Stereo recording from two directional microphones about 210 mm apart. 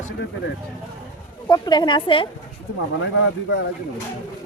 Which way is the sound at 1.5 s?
20° left (ahead or behind).